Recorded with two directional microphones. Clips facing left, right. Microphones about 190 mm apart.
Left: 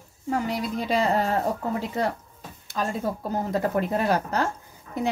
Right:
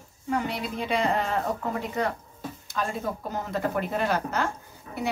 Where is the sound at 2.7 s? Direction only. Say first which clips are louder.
Left 3 dB; 35° left (ahead or behind).